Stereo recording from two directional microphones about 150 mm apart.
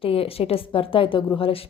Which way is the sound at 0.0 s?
40° left (ahead or behind).